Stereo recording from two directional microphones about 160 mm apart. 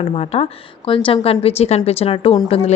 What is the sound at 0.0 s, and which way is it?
Speech, 40° left (ahead or behind).